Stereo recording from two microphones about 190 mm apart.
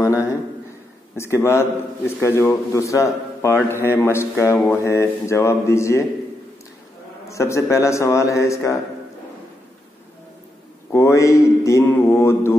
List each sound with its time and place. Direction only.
1.1 s a man's voice: 15° left (ahead or behind)
7.2 s a man's voice: 15° left (ahead or behind)
10.9 s a man's voice: 15° left (ahead or behind)